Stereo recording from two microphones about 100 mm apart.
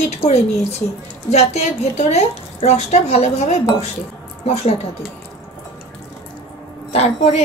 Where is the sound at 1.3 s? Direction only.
90° left.